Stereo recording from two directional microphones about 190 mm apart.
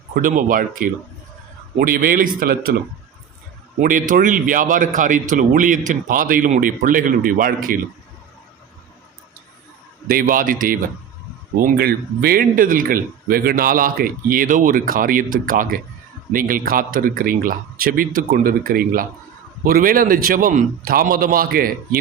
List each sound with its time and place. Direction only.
0.1 s speech: 45° right (ahead or behind)
3.8 s speech: 45° right (ahead or behind)
10.1 s speech: 45° right (ahead or behind)